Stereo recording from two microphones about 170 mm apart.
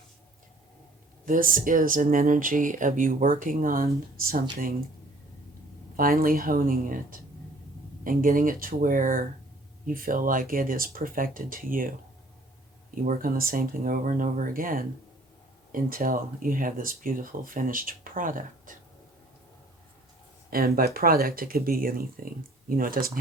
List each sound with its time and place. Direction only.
1.2 s speech: 55° right (ahead or behind)
6.0 s speech: 60° right (ahead or behind)
13.1 s speech: 60° right (ahead or behind)
20.7 s speech: 60° right (ahead or behind)